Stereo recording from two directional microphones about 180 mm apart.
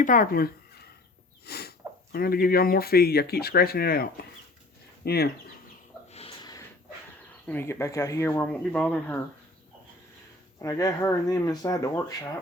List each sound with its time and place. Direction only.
0.0 s speech: 50° left (ahead or behind)
1.5 s sneeze: 65° left (ahead or behind)
2.1 s speech: 55° left (ahead or behind)
6.1 s a sound: 35° left (ahead or behind)
6.4 s a sound: 20° left (ahead or behind)
7.4 s speech: 10° left (ahead or behind)
10.6 s speech: 20° left (ahead or behind)